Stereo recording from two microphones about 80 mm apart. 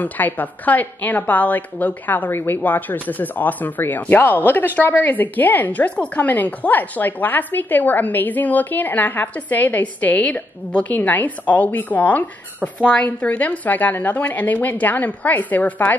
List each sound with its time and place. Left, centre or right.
0.0 s a woman's voice: left